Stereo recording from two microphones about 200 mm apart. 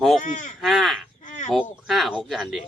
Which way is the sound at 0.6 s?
Centre (ahead or behind).